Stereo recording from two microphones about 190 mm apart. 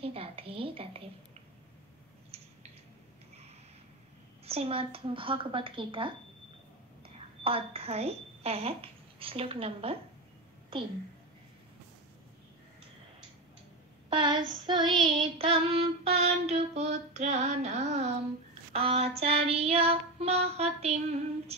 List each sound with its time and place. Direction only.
0.0 s a woman's voice: 30° right (ahead or behind)
4.5 s a woman's voice: 30° right (ahead or behind)
7.4 s speech: 30° right (ahead or behind)
14.0 s a woman's voice: 25° right (ahead or behind)
15.0 s child singing: 25° right (ahead or behind)